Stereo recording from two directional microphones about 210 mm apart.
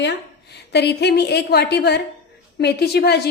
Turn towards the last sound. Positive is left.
turn(degrees=50)  # may be behind; listen again after turning